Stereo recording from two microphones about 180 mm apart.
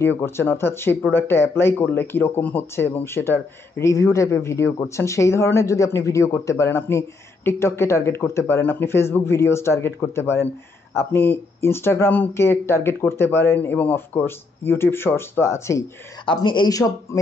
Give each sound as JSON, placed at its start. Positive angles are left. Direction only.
{"t": 0.0, "sound": "speech", "side_deg": 10}
{"t": 16.3, "sound": "speech", "side_deg": 25}